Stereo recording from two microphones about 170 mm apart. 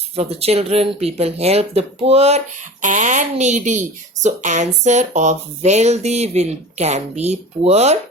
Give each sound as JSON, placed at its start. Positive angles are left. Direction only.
{"t": 0.2, "sound": "speech", "side_deg": -35}